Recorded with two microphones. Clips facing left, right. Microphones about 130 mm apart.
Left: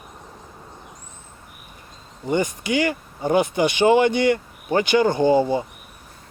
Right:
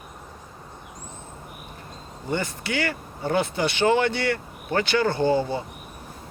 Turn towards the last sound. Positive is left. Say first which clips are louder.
# left 5 dB
turn(degrees=15)  # may be behind; listen again after turning